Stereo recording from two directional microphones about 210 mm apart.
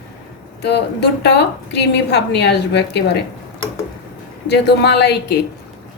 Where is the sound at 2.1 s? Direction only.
55° left (ahead or behind).